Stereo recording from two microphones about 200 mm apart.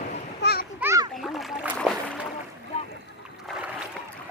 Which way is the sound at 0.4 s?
55° left (ahead or behind).